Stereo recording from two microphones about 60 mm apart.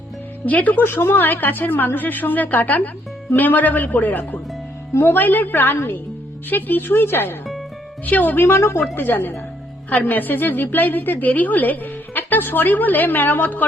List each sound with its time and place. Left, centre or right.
0.4 s a woman's voice: left
9.0 s a woman's voice: left